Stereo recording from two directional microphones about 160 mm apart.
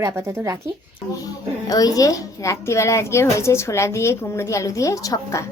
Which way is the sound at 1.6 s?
25° left (ahead or behind).